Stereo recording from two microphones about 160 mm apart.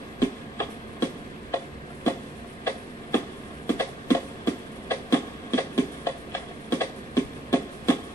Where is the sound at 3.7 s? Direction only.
15° left (ahead or behind).